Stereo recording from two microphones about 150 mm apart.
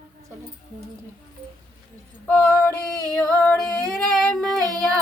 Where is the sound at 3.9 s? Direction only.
Centre (ahead or behind).